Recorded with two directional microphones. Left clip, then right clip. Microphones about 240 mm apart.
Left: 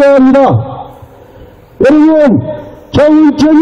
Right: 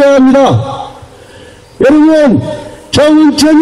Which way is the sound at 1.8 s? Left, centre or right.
Right.